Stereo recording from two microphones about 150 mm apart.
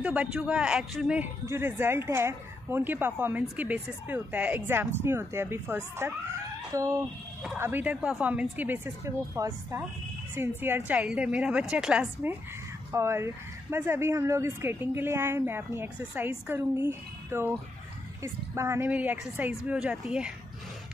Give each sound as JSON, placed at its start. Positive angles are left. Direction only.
{"t": 0.0, "sound": "a man's voice", "side_deg": -10}
{"t": 1.4, "sound": "a woman's voice", "side_deg": -15}
{"t": 12.9, "sound": "a woman's voice", "side_deg": -15}
{"t": 18.9, "sound": "speech", "side_deg": -10}